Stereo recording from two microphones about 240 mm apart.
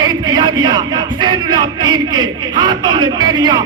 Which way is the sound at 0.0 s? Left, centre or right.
Centre.